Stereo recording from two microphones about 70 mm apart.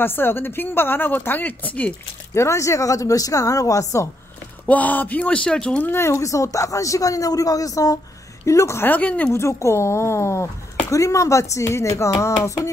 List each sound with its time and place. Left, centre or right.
0.0 s speech: left
2.3 s a woman's voice: left
4.6 s speech: left
5.9 s a woman's voice: left
8.5 s a woman's voice: left
8.8 s speech: left
9.3 s a woman's voice: left